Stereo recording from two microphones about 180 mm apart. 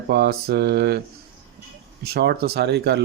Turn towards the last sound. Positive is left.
turn(degrees=-70)  # may be behind; listen again after turning